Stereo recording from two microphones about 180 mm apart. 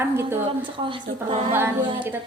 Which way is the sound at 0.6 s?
30° right (ahead or behind).